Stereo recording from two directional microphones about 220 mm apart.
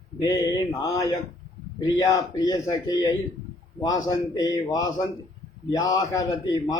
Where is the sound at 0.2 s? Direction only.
20° left (ahead or behind).